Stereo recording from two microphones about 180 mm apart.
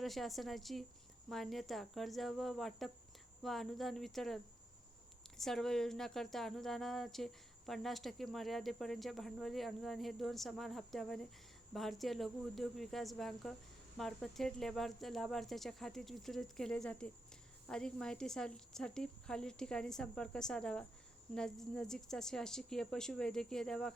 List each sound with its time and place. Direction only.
0.0 s speech: centre (ahead or behind)
5.4 s speech: centre (ahead or behind)